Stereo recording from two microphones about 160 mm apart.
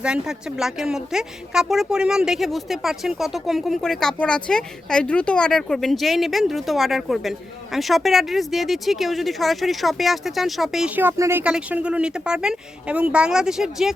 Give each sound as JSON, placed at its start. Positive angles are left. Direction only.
{"t": 0.0, "sound": "a woman's voice", "side_deg": -5}